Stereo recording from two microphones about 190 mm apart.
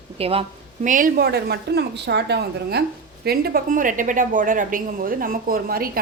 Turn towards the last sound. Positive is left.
turn(degrees=-50)  # may be behind; listen again after turning